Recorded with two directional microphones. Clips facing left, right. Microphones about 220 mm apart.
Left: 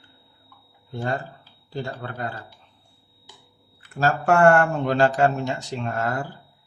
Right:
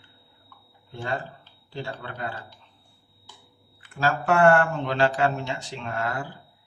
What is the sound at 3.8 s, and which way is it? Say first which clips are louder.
Speech: left 3 dB; 45° left (ahead or behind).